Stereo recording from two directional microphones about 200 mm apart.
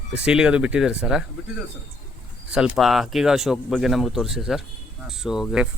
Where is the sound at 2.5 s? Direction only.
5° right (ahead or behind).